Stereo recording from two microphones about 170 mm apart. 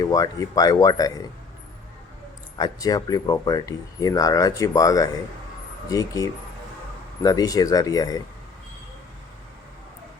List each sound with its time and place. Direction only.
0.0 s speech: 20° left (ahead or behind)
2.6 s speech: 25° left (ahead or behind)